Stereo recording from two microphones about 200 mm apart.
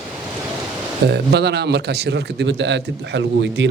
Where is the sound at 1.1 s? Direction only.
55° right (ahead or behind).